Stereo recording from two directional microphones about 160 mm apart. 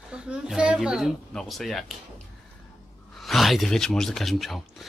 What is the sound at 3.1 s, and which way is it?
Speech, centre (ahead or behind).